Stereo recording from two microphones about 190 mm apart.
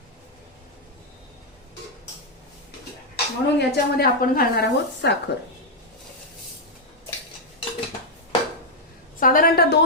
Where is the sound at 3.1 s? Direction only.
60° left (ahead or behind).